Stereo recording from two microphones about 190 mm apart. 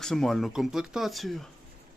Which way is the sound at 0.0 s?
Centre (ahead or behind).